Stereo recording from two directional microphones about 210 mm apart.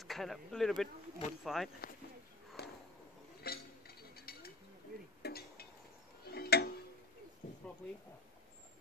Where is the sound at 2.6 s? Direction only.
50° left (ahead or behind).